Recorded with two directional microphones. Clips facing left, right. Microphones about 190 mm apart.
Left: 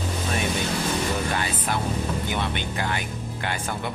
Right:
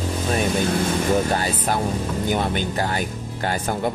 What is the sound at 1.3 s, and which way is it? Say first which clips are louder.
Speech: right 4 dB; 40° right (ahead or behind).